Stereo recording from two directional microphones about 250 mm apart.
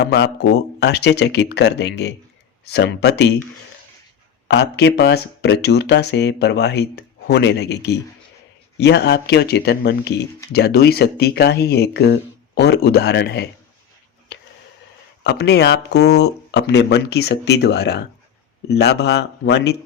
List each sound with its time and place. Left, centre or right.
0.0 s speech: left
4.4 s speech: left
15.2 s speech: left